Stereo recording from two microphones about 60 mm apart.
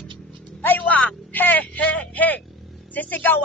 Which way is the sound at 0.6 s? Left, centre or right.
Left.